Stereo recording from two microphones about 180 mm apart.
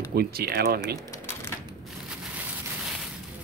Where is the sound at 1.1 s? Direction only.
15° left (ahead or behind).